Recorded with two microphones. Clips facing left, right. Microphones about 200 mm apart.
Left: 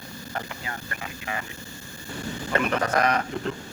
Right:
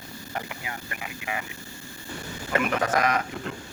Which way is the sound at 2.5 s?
5° right (ahead or behind).